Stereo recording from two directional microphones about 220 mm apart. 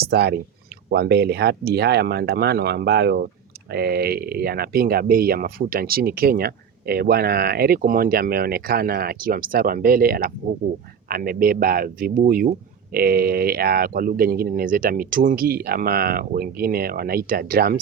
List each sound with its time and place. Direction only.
0.1 s speech: 45° right (ahead or behind)